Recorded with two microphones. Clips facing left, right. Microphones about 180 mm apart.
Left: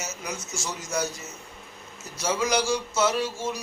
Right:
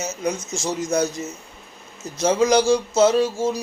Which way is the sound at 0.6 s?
40° right (ahead or behind).